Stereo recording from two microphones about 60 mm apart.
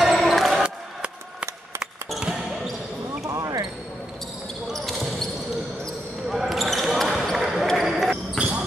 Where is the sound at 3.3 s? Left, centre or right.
Right.